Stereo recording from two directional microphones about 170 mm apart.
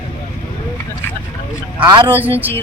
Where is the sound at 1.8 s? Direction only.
30° right (ahead or behind).